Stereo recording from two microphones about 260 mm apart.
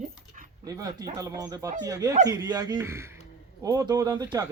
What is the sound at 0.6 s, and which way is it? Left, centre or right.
Speech, centre.